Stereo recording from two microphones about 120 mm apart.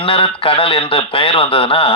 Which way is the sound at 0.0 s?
50° left (ahead or behind).